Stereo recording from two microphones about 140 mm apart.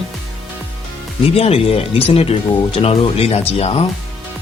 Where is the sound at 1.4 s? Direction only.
45° left (ahead or behind).